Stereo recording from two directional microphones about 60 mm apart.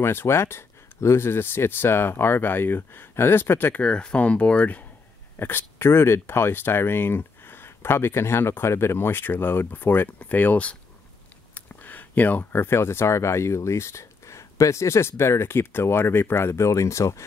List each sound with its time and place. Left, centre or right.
0.0 s speech: left
3.8 s speech: centre
5.4 s speech: left
11.5 s a sound: left
12.6 s speech: left